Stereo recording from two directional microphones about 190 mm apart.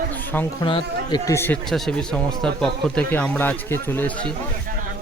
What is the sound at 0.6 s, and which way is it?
Speech, 25° left (ahead or behind).